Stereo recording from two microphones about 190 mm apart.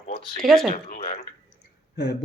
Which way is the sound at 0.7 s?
45° left (ahead or behind).